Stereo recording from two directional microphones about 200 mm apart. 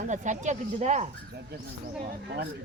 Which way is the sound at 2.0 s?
55° right (ahead or behind).